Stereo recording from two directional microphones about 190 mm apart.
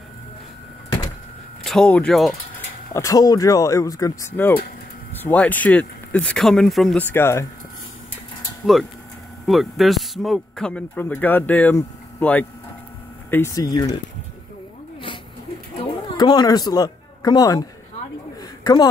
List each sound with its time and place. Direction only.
1.6 s speech: 5° left (ahead or behind)
2.9 s speech: 15° left (ahead or behind)
8.6 s speech: 5° right (ahead or behind); by 13.9 s 20° left (ahead or behind)
15.8 s speech: 20° left (ahead or behind)
18.4 s a sound: 20° left (ahead or behind)